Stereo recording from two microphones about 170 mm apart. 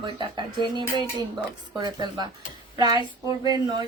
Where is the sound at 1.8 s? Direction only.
25° right (ahead or behind).